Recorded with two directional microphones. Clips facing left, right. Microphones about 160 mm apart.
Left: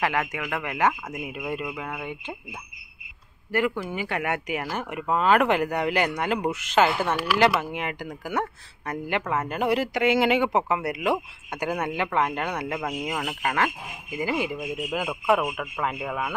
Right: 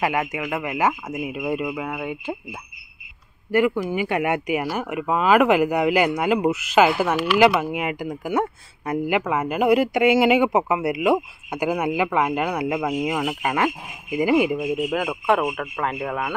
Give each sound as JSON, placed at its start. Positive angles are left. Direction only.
{"t": 0.0, "sound": "speech", "side_deg": -10}
{"t": 3.5, "sound": "speech", "side_deg": -10}
{"t": 14.9, "sound": "speech", "side_deg": 0}